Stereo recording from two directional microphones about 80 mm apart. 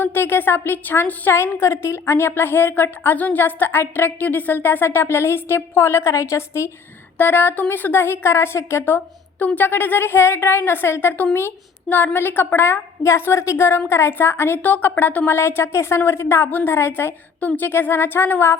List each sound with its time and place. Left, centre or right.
0.0 s a woman's voice: left
7.2 s a woman's voice: left